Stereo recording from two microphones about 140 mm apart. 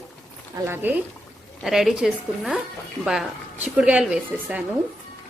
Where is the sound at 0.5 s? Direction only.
15° right (ahead or behind).